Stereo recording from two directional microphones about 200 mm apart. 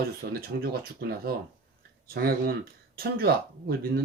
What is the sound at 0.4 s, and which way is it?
Speech, 50° right (ahead or behind).